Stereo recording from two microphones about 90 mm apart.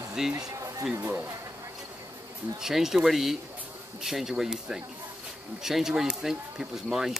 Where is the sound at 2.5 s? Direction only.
5° right (ahead or behind).